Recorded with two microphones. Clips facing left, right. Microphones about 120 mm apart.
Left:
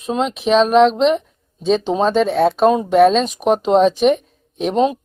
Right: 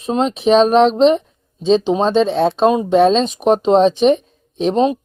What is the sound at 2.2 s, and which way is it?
Speech, 25° right (ahead or behind).